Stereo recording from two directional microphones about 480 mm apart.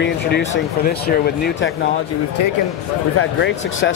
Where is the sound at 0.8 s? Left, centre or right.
Centre.